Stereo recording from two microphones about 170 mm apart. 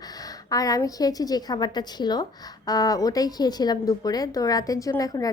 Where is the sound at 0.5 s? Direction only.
20° left (ahead or behind).